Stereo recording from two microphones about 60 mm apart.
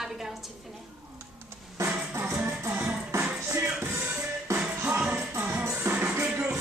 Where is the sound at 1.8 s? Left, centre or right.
Right.